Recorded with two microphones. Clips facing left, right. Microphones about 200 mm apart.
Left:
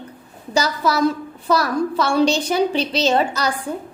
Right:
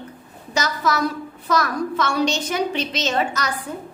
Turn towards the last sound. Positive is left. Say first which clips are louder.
# left 5 dB
turn(degrees=30)  # may be behind; listen again after turning